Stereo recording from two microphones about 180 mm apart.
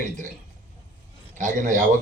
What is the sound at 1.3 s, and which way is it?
Speech, 45° right (ahead or behind).